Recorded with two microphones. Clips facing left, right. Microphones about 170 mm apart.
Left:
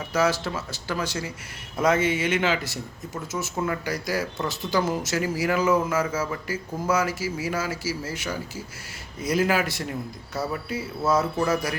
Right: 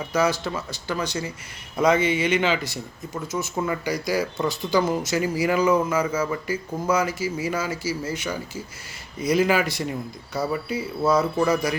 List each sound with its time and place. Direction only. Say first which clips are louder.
0.1 s speech: right 1 dB; 5° left (ahead or behind)